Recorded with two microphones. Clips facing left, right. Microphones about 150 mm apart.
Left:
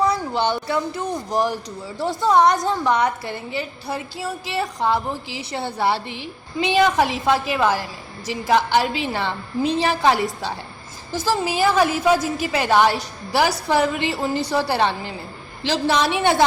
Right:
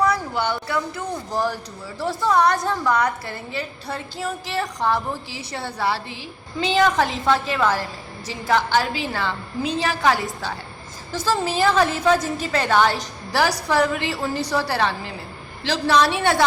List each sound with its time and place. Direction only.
0.0 s a woman's voice: 25° left (ahead or behind)
6.6 s a woman's voice: 15° left (ahead or behind)
11.1 s a woman's voice: 10° left (ahead or behind)